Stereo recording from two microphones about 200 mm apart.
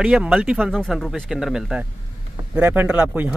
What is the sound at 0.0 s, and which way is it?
Speech, 5° right (ahead or behind).